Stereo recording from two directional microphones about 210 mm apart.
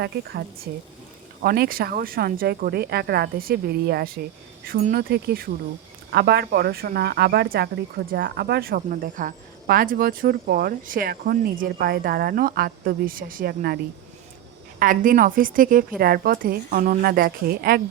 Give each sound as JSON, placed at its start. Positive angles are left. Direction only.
{"t": 0.0, "sound": "speech", "side_deg": -50}
{"t": 14.8, "sound": "a woman's voice", "side_deg": -40}